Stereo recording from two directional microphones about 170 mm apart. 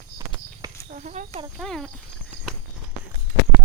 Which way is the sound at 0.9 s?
45° right (ahead or behind).